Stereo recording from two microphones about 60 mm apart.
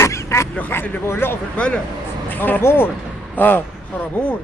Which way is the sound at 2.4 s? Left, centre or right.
Left.